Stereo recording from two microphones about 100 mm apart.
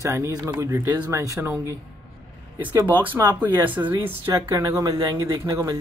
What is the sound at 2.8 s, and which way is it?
Speech, 15° right (ahead or behind).